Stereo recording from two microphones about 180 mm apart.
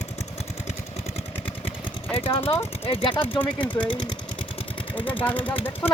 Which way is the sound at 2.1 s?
30° left (ahead or behind).